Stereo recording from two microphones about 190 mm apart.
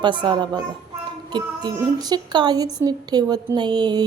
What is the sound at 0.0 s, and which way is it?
Speech, 25° right (ahead or behind).